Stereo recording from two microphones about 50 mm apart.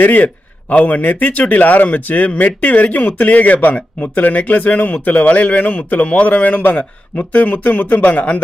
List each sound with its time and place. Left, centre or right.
0.0 s speech: left